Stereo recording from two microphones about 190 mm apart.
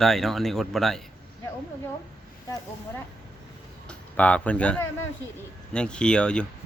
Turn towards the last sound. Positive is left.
turn(degrees=5)  # may be behind; listen again after turning